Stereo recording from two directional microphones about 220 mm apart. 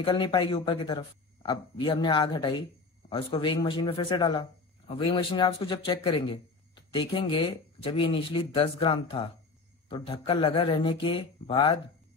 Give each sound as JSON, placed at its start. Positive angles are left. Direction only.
{"t": 0.0, "sound": "speech", "side_deg": 20}